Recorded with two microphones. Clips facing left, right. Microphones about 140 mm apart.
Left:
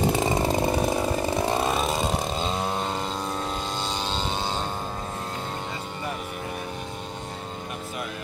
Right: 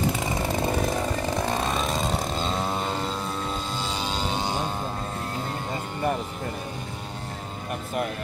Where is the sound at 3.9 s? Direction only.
10° right (ahead or behind).